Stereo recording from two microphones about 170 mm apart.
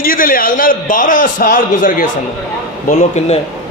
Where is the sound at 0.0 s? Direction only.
55° left (ahead or behind).